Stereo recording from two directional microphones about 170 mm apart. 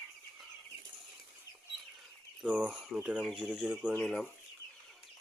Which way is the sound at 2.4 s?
5° right (ahead or behind).